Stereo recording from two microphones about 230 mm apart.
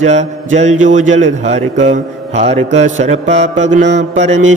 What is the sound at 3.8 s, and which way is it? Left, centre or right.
Mantra, right.